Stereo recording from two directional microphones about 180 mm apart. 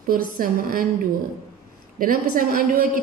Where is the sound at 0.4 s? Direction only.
50° right (ahead or behind).